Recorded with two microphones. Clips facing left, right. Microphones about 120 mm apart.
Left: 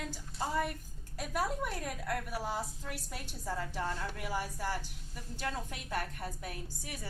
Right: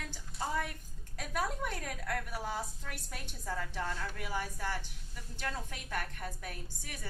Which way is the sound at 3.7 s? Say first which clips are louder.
Left 1 dB; 20° left (ahead or behind).